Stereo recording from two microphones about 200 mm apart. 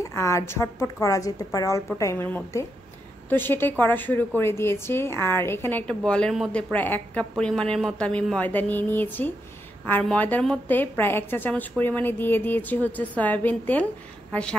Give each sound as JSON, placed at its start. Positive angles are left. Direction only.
{"t": 0.0, "sound": "a woman's voice", "side_deg": 15}